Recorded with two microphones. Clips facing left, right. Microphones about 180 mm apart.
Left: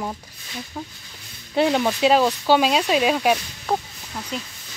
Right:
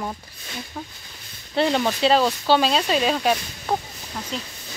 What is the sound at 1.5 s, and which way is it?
Speech, 5° left (ahead or behind).